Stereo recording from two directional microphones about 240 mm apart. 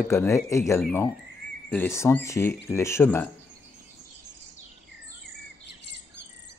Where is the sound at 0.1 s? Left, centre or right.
Centre.